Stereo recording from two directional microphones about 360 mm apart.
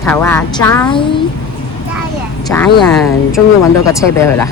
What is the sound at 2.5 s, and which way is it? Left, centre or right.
Speech, centre.